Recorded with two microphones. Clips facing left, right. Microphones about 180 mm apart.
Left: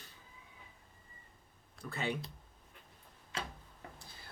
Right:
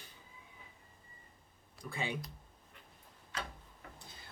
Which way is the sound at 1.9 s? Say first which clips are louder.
Left 2 dB; 10° right (ahead or behind).